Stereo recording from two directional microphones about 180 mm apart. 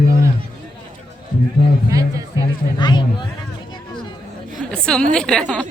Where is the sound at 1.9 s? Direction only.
20° right (ahead or behind).